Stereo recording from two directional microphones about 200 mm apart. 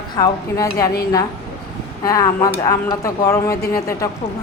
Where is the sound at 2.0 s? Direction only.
15° left (ahead or behind).